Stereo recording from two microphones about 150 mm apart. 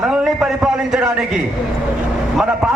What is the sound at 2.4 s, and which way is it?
Speech, 5° right (ahead or behind).